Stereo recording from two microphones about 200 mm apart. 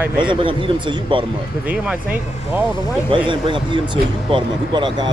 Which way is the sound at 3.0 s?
25° right (ahead or behind).